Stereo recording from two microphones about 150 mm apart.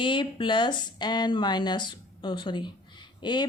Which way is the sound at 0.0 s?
35° left (ahead or behind).